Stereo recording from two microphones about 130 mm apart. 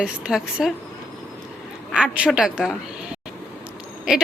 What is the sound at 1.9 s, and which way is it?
Speech, 5° right (ahead or behind).